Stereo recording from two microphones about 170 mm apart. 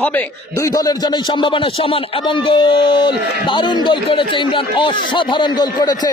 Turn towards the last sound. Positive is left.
turn(degrees=25)  # may be behind; listen again after turning